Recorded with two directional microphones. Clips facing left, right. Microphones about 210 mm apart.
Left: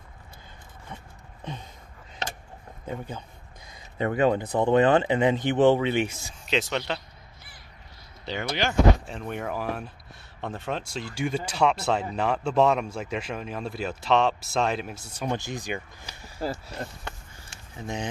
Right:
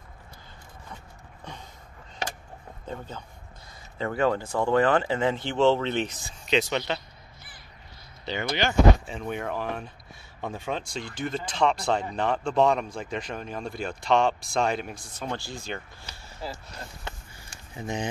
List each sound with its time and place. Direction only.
2.9 s speech: 15° left (ahead or behind)
8.3 s speech: centre (ahead or behind)
15.1 s speech: 15° left (ahead or behind)
17.8 s speech: centre (ahead or behind)